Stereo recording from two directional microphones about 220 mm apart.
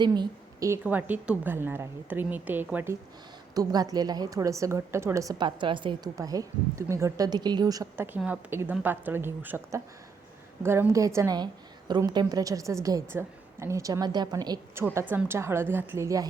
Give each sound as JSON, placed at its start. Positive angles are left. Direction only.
{"t": 0.0, "sound": "a woman's voice", "side_deg": -20}